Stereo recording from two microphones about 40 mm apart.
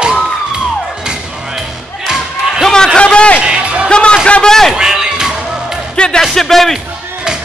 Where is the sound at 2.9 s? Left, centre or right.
Left.